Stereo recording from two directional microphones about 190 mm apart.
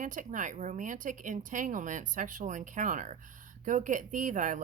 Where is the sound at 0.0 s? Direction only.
40° right (ahead or behind).